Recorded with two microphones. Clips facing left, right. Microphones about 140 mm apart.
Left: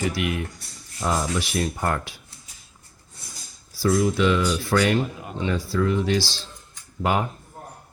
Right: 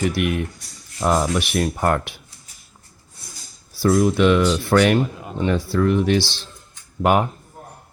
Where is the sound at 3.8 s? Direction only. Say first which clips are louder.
Right 4 dB; 60° right (ahead or behind).